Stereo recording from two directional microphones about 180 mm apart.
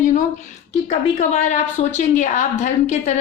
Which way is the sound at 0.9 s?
40° left (ahead or behind).